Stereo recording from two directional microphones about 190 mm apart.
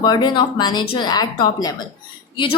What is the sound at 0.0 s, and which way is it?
A woman's voice, 25° left (ahead or behind).